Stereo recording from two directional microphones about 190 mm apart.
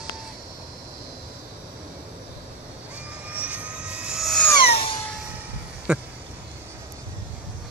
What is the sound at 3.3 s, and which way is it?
Vehicle, 5° right (ahead or behind).